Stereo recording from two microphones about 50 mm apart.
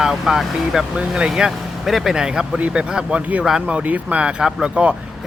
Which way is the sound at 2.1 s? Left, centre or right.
Centre.